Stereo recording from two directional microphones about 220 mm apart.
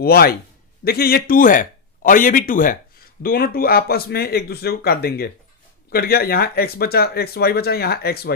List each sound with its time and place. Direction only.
0.0 s a man's voice: 45° left (ahead or behind)